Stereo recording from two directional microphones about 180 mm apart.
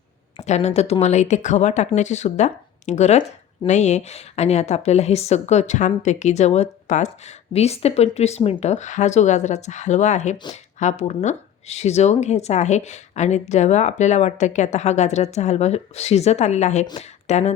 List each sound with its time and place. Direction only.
0.3 s speech: 40° left (ahead or behind)